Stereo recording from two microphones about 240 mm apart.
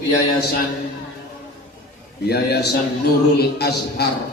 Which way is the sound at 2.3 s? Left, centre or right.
Left.